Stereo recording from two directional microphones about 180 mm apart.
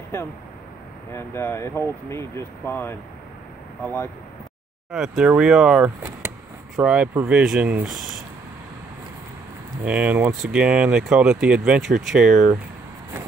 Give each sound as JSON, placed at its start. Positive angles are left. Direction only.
{"t": 1.1, "sound": "speech", "side_deg": 15}
{"t": 4.9, "sound": "speech", "side_deg": -5}
{"t": 9.8, "sound": "speech", "side_deg": -5}